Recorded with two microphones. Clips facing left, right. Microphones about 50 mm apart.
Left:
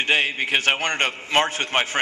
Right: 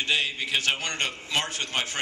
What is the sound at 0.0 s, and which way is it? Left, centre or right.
A man's voice, left.